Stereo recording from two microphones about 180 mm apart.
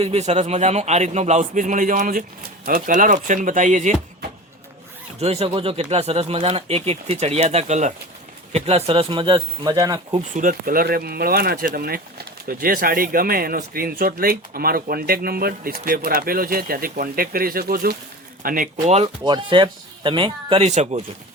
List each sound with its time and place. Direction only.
0.0 s speech: 35° right (ahead or behind)
5.2 s speech: 35° right (ahead or behind)
10.2 s speech: 45° right (ahead or behind)
18.9 s speech: 30° right (ahead or behind)